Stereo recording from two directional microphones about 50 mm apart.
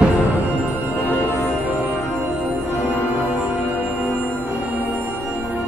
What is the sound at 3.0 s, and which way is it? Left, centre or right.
Music, right.